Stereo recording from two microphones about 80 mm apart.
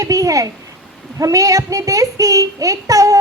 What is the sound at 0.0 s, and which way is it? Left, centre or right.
A child's voice, right.